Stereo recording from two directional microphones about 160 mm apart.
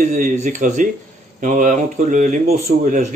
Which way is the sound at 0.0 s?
55° right (ahead or behind).